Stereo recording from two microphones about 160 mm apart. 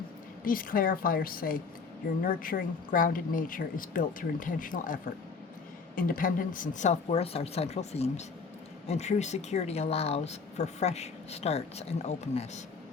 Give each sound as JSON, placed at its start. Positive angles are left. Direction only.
{"t": 0.4, "sound": "a woman's voice", "side_deg": 60}
{"t": 6.0, "sound": "speech", "side_deg": 60}